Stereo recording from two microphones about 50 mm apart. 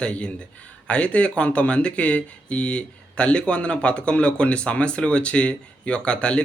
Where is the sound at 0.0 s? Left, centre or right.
Left.